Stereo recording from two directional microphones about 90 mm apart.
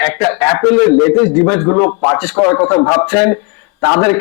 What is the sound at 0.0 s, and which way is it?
A man's voice, 15° left (ahead or behind).